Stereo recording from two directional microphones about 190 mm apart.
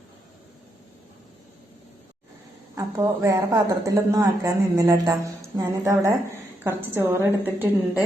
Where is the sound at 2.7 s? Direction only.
15° right (ahead or behind).